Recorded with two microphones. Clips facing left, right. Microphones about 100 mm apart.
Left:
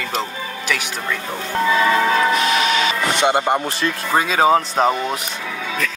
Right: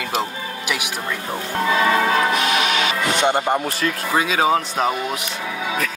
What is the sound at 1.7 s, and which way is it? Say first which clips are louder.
Change ringing: left 1 dB; 20° right (ahead or behind).